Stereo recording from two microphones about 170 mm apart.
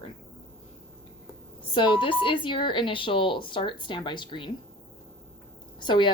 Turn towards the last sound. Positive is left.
turn(degrees=30)  # may be behind; listen again after turning